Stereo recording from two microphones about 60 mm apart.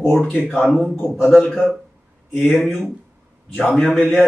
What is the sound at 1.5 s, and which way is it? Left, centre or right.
Speech, centre.